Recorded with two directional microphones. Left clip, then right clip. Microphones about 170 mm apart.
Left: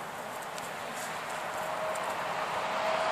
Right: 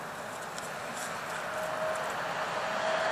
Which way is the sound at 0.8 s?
40° right (ahead or behind).